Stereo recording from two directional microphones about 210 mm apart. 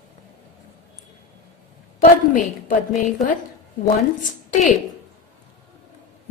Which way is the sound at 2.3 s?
40° left (ahead or behind).